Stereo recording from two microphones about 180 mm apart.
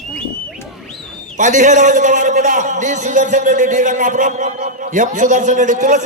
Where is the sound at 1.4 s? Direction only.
45° right (ahead or behind).